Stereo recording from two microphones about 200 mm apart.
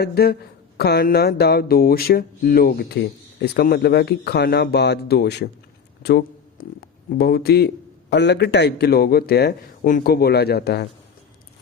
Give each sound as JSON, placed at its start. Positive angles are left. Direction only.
{"t": 0.0, "sound": "speech", "side_deg": 50}
{"t": 6.0, "sound": "a sound", "side_deg": 55}
{"t": 7.2, "sound": "speech", "side_deg": 50}